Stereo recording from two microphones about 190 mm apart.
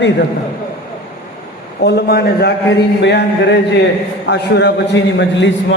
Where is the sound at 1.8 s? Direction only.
60° left (ahead or behind).